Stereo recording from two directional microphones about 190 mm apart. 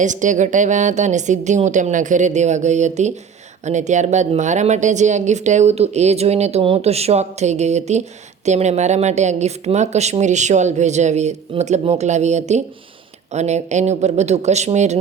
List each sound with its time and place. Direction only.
0.0 s speech: 40° right (ahead or behind)